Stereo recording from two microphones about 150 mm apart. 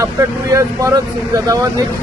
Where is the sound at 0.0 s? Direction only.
20° right (ahead or behind).